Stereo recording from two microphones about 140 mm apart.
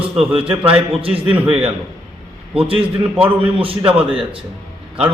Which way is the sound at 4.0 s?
40° right (ahead or behind).